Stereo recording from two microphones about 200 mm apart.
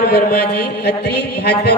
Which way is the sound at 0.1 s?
50° left (ahead or behind).